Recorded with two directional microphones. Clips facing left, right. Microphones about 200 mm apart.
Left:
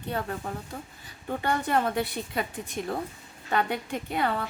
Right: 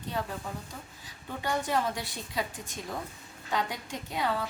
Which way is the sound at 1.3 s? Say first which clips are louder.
Left 4 dB; 55° left (ahead or behind).